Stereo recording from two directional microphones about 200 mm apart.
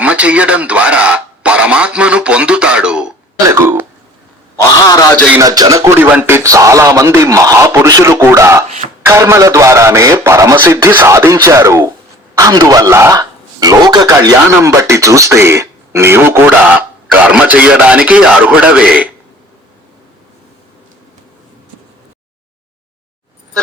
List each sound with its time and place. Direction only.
0.0 s a man's voice: 5° right (ahead or behind)
5.4 s a man's voice: 20° right (ahead or behind)